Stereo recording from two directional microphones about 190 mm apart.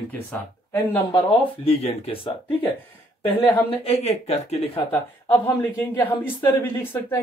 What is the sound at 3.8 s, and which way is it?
Speech, 30° left (ahead or behind).